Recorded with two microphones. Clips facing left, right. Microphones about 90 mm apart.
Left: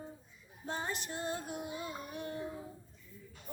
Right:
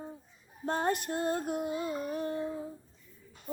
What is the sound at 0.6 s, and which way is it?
Child singing, 55° right (ahead or behind).